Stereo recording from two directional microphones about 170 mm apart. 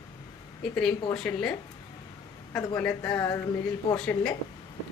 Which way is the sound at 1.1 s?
5° left (ahead or behind).